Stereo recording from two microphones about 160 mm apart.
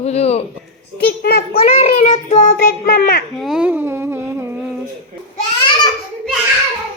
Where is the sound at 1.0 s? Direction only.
75° left (ahead or behind).